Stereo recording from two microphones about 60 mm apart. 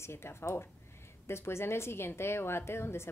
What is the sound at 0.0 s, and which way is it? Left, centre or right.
Speech, left.